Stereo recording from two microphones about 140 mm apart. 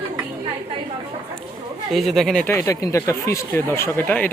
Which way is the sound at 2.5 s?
20° left (ahead or behind).